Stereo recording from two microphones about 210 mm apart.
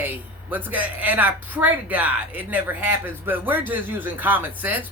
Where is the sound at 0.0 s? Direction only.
10° right (ahead or behind).